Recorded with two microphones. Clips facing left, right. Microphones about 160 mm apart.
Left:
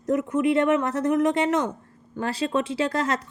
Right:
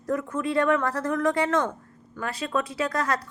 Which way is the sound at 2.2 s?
30° left (ahead or behind).